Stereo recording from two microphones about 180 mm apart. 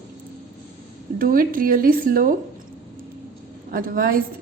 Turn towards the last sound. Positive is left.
turn(degrees=-55)  # may be behind; listen again after turning